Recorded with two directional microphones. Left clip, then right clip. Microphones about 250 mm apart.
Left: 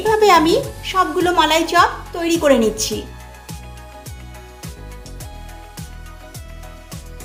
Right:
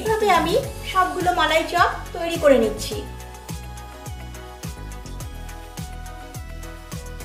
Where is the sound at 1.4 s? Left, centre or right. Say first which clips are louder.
Left 5 dB; left.